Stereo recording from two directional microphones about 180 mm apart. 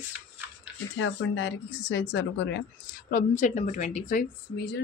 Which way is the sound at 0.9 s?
90° left.